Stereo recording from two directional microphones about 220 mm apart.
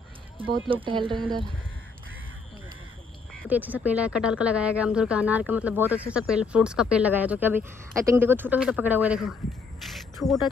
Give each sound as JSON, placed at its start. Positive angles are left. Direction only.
{"t": 0.7, "sound": "speech", "side_deg": -25}
{"t": 3.4, "sound": "speech", "side_deg": -5}